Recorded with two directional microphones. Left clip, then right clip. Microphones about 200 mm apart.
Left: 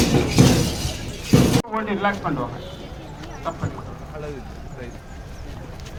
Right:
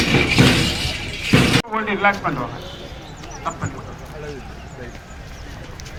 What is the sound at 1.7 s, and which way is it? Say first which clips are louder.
Speech: right 5 dB; 25° right (ahead or behind).